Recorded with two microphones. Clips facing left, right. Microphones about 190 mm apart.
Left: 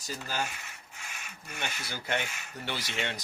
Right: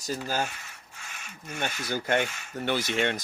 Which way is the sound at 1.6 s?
50° right (ahead or behind).